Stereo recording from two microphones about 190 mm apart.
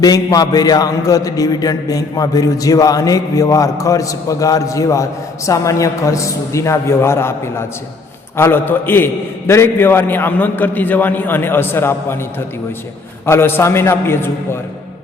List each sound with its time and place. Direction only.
0.0 s a man's voice: 20° left (ahead or behind)
13.2 s a man's voice: 10° left (ahead or behind)